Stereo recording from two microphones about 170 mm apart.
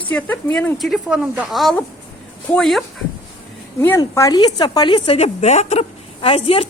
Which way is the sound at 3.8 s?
15° left (ahead or behind).